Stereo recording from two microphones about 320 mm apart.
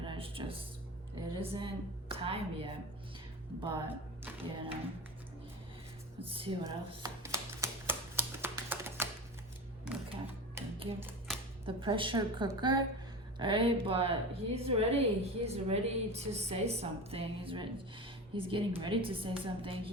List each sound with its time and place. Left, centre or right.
0.0 s music: centre
1.5 s speech: centre
6.2 s a sound: centre
10.1 s speech: centre